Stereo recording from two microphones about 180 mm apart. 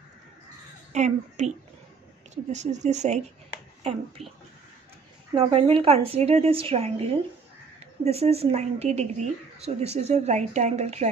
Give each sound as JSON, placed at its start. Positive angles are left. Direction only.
{"t": 0.9, "sound": "speech", "side_deg": -40}
{"t": 4.2, "sound": "speech", "side_deg": 0}
{"t": 5.3, "sound": "speech", "side_deg": -30}